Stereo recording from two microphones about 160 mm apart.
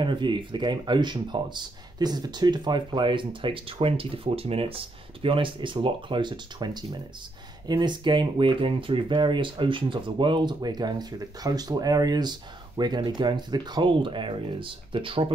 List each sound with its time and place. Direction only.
0.0 s speech: 30° right (ahead or behind)